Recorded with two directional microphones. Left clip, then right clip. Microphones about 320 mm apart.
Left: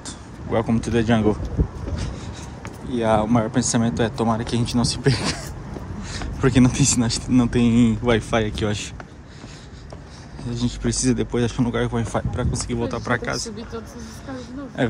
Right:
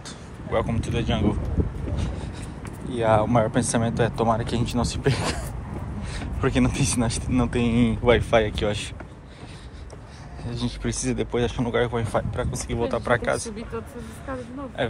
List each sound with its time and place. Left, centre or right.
0.5 s speech: centre
2.9 s speech: centre
10.4 s speech: centre
14.8 s speech: centre